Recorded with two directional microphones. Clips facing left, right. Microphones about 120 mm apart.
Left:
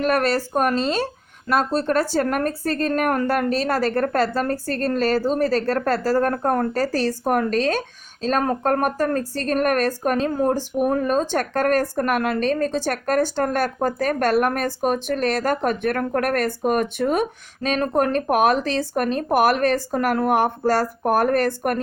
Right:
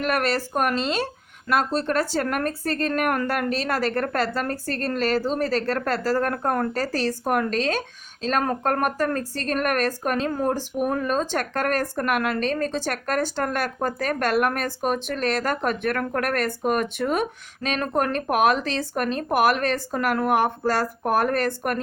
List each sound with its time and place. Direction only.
0.0 s speech: 35° left (ahead or behind)